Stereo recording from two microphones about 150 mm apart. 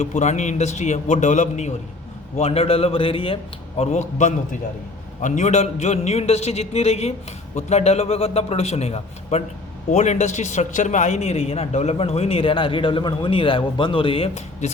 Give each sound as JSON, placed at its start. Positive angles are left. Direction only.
{"t": 0.0, "sound": "a man's voice", "side_deg": 50}
{"t": 2.4, "sound": "a man's voice", "side_deg": 40}
{"t": 3.8, "sound": "a man's voice", "side_deg": 50}